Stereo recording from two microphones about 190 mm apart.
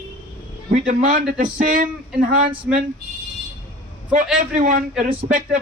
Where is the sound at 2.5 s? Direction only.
10° right (ahead or behind).